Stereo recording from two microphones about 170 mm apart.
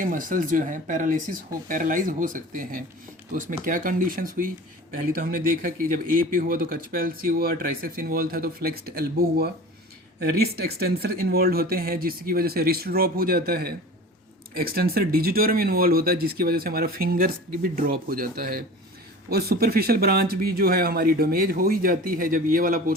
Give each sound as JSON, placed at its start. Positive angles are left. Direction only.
{"t": 0.0, "sound": "speech", "side_deg": -50}